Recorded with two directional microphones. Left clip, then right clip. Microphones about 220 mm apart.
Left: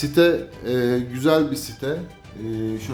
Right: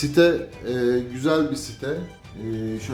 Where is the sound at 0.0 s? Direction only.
10° left (ahead or behind).